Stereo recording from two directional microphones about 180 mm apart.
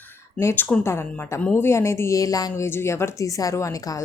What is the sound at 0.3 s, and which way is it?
Speech, 15° left (ahead or behind).